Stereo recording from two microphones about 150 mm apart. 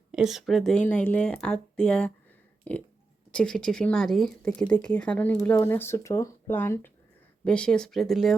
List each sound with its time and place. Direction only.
0.1 s speech: 5° right (ahead or behind)